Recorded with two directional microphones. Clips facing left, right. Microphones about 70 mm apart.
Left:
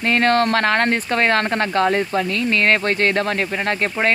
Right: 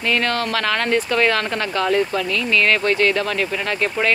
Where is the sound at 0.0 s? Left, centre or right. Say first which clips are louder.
Left 4 dB; left.